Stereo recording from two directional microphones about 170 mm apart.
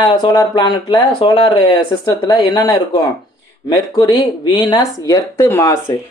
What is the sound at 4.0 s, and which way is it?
A man's voice, 25° left (ahead or behind).